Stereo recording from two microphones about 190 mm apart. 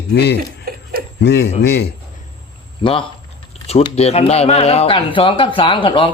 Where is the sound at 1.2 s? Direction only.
65° left (ahead or behind).